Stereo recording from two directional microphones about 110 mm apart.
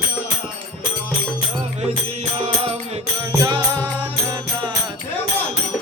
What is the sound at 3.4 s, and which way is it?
Music, 40° right (ahead or behind).